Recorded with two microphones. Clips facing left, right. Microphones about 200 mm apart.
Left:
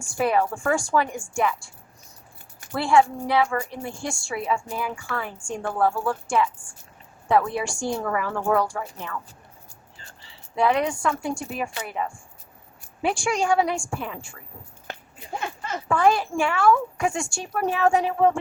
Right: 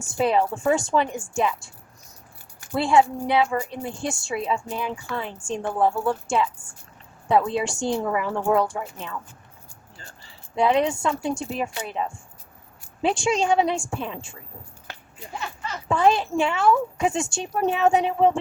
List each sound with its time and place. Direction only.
0.0 s a woman's voice: 20° right (ahead or behind)
2.7 s a woman's voice: 20° right (ahead or behind)
10.5 s a woman's voice: 20° right (ahead or behind)
15.4 s a sound: 50° left (ahead or behind)
15.9 s a woman's voice: 25° right (ahead or behind)